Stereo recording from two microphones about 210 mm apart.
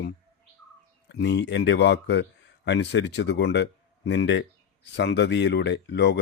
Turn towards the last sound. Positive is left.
turn(degrees=55)  # may be behind; listen again after turning